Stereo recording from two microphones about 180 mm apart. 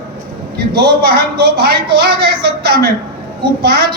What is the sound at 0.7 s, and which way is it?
Speech, 65° right (ahead or behind).